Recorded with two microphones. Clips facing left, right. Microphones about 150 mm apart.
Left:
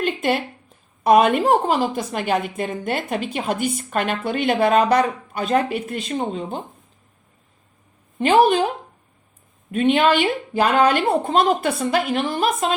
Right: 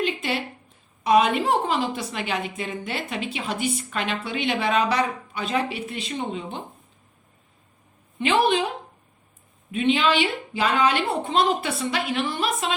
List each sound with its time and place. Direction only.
0.0 s a sound: 50° left (ahead or behind)
1.0 s a woman's voice: 50° left (ahead or behind)
8.2 s a woman's voice: 45° left (ahead or behind)
9.7 s a woman's voice: 50° left (ahead or behind)